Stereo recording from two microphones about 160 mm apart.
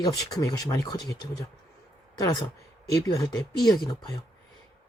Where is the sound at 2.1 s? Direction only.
20° left (ahead or behind).